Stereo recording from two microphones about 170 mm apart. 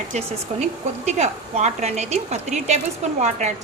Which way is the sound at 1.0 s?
40° right (ahead or behind).